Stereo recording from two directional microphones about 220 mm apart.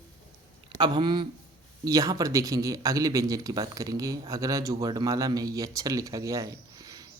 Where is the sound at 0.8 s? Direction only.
20° right (ahead or behind).